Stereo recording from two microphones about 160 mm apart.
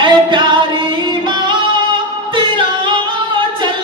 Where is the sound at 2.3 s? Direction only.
30° right (ahead or behind).